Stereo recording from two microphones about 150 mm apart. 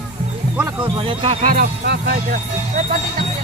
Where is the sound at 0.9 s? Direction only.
40° right (ahead or behind).